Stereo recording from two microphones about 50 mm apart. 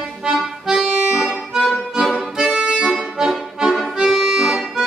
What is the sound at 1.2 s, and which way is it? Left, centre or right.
Music, centre.